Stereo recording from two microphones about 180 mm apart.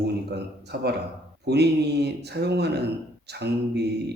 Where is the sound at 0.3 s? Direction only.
65° right (ahead or behind).